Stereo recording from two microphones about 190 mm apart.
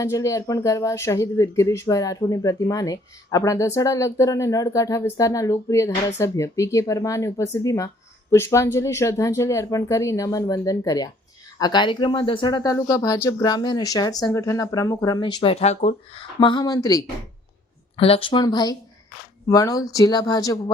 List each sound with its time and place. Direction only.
0.0 s speech: 15° left (ahead or behind)
15.5 s speech: 35° left (ahead or behind)
16.4 s speech: 25° left (ahead or behind)
17.9 s speech: 30° left (ahead or behind)